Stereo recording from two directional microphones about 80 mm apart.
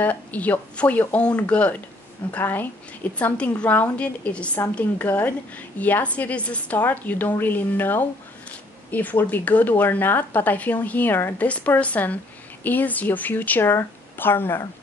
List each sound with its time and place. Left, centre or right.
0.0 s a woman's voice: centre
11.4 s a woman's voice: centre